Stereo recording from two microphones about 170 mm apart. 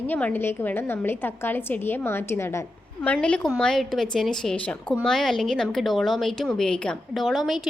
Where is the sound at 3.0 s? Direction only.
5° left (ahead or behind).